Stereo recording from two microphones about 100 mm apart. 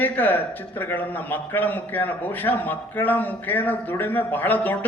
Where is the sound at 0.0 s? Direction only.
20° left (ahead or behind).